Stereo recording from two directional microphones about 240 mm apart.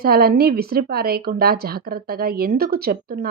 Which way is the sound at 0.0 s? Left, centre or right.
Right.